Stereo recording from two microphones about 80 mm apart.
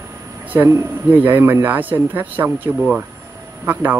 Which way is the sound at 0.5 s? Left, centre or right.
Right.